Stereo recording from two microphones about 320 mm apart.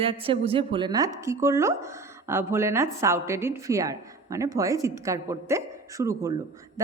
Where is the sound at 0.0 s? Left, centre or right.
Centre.